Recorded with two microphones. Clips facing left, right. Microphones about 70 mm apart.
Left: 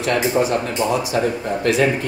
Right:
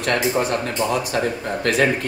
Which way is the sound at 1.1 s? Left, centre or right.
Right.